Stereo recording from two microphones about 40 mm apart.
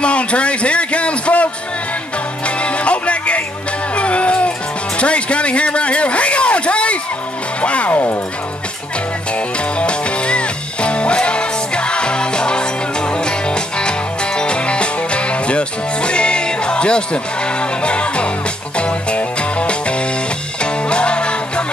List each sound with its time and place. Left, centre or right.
0.0 s speech: left
2.4 s music: left
3.9 s a sound: left
4.9 s music: left
7.6 s speech: left
7.9 s speech: left
9.8 s music: left